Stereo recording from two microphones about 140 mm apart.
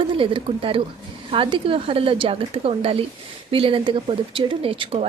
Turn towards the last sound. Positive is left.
turn(degrees=-40)  # may be behind; listen again after turning